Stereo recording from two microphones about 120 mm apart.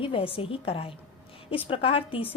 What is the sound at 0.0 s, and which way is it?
A woman's voice, 50° left (ahead or behind).